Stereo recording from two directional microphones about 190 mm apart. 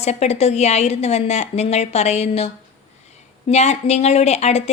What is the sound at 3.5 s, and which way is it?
Speech, 35° left (ahead or behind).